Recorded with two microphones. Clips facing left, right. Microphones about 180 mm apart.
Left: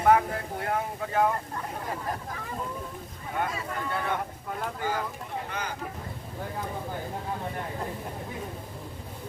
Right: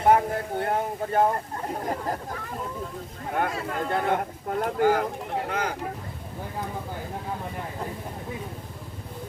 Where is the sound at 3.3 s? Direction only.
60° right (ahead or behind).